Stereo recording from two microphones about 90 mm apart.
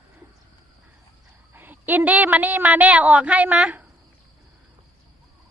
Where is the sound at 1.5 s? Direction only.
20° right (ahead or behind).